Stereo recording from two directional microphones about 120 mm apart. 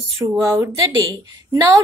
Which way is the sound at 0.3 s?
25° right (ahead or behind).